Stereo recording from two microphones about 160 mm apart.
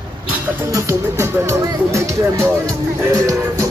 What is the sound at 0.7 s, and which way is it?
Speech, 20° right (ahead or behind).